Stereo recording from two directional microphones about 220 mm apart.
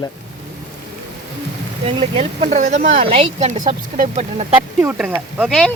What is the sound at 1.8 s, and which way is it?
Speech, 25° right (ahead or behind).